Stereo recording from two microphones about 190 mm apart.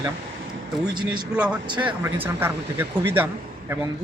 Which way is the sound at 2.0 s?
10° right (ahead or behind).